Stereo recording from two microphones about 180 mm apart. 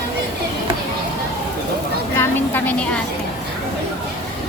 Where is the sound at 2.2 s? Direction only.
10° left (ahead or behind).